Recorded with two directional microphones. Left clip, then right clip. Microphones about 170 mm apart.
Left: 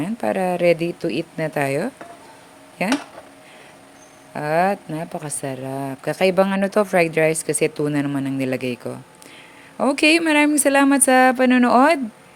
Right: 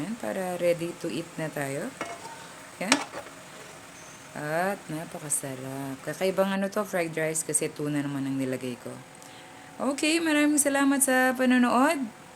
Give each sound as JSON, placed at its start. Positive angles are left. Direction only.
{"t": 0.0, "sound": "speech", "side_deg": 45}
{"t": 4.4, "sound": "speech", "side_deg": 45}